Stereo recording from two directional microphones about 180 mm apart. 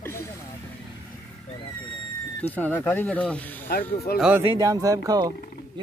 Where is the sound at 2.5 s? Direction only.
10° left (ahead or behind).